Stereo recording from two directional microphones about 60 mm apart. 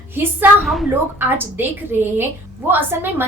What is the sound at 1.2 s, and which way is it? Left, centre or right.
A woman's voice, right.